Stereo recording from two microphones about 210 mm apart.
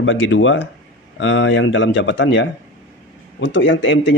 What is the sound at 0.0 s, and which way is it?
Speech, 65° left (ahead or behind).